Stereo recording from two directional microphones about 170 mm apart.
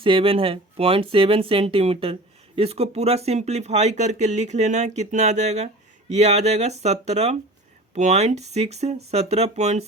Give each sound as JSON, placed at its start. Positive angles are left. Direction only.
{"t": 0.0, "sound": "speech", "side_deg": -30}